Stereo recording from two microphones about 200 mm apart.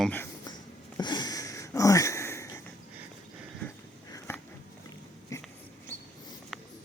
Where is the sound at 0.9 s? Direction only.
20° left (ahead or behind).